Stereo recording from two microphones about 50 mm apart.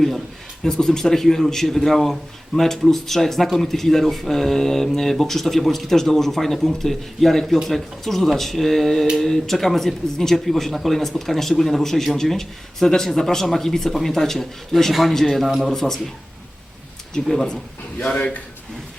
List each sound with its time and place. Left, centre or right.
0.6 s speech: centre
17.2 s speech: centre
18.0 s speech: left